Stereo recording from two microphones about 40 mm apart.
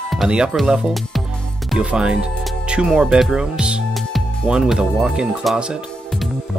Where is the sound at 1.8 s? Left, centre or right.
Right.